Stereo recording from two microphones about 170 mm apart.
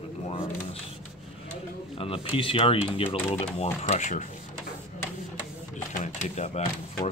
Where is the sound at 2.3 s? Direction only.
35° left (ahead or behind).